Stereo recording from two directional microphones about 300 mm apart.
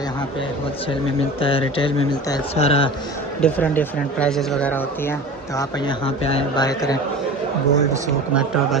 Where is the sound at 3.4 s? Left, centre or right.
Centre.